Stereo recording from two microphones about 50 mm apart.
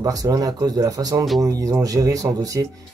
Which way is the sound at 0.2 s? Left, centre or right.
Right.